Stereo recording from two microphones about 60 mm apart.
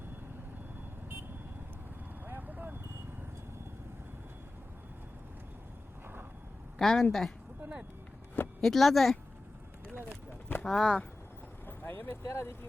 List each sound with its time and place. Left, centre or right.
2.2 s a sound: right
6.7 s a woman's voice: centre
8.6 s speech: centre
10.7 s speech: centre
11.6 s vehicle: left
12.2 s speech: left